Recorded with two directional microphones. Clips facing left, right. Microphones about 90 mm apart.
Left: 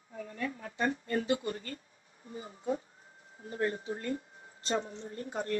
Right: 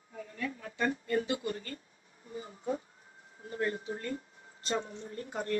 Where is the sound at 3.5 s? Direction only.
35° left (ahead or behind).